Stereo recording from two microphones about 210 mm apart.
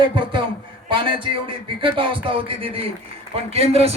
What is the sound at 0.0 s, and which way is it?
A man's voice, 25° right (ahead or behind).